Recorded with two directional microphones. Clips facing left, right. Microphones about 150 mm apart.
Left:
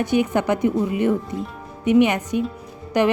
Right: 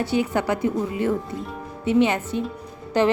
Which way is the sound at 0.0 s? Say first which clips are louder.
Left 3 dB; 20° left (ahead or behind).